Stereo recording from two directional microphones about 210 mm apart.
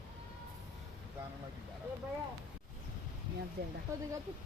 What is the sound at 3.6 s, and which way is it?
Speech, 50° right (ahead or behind).